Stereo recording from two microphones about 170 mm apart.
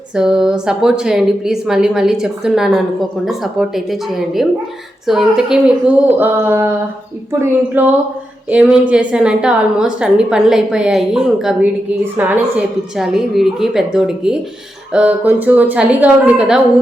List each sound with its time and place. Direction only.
0.2 s a woman's voice: 5° right (ahead or behind)